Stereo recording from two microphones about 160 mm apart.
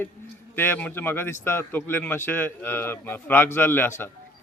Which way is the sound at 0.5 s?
10° left (ahead or behind).